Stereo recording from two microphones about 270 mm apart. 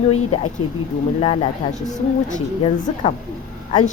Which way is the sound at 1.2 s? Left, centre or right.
Left.